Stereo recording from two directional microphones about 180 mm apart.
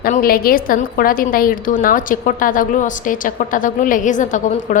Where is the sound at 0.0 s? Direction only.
55° left (ahead or behind).